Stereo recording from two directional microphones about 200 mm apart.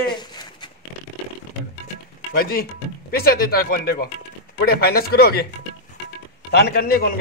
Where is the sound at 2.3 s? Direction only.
50° left (ahead or behind).